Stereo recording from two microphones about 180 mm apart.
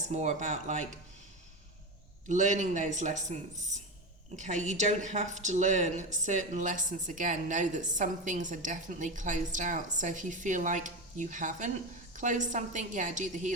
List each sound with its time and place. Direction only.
0.1 s a man's voice: 40° right (ahead or behind)
2.3 s a man's voice: 40° right (ahead or behind)
4.4 s a woman's voice: 40° right (ahead or behind)